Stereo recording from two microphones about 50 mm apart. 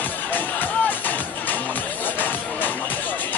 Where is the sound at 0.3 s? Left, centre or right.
Left.